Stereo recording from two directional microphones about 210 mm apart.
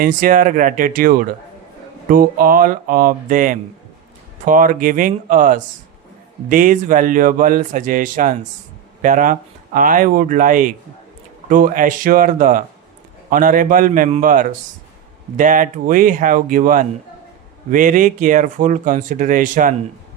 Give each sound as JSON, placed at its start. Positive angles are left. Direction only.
{"t": 0.0, "sound": "speech", "side_deg": -40}